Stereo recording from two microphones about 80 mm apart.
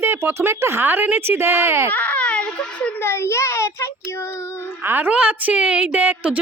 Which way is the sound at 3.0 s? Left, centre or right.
Left.